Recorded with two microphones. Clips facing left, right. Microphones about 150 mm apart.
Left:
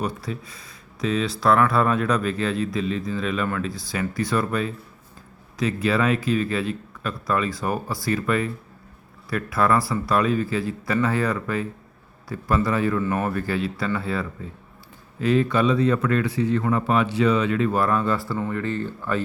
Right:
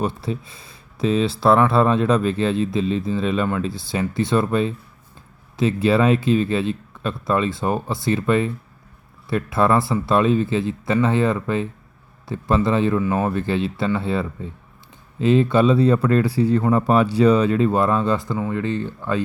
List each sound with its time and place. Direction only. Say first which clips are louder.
0.0 s speech: right 4 dB; 25° right (ahead or behind)